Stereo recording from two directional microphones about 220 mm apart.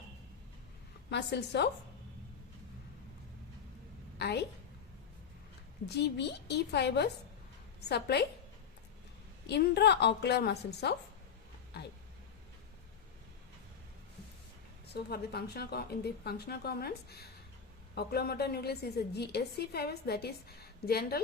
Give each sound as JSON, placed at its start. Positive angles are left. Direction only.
{"t": 1.1, "sound": "a woman's voice", "side_deg": 50}
{"t": 4.2, "sound": "a woman's voice", "side_deg": 50}
{"t": 5.8, "sound": "a woman's voice", "side_deg": 50}
{"t": 9.5, "sound": "a woman's voice", "side_deg": 50}
{"t": 14.9, "sound": "a woman's voice", "side_deg": 45}